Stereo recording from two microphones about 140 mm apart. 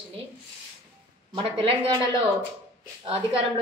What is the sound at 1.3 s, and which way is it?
Speech, 40° right (ahead or behind).